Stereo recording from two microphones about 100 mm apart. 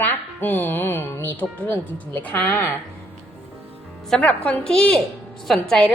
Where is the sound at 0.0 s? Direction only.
20° left (ahead or behind).